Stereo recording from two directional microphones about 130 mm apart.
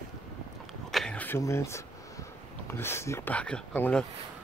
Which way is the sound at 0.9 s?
10° left (ahead or behind).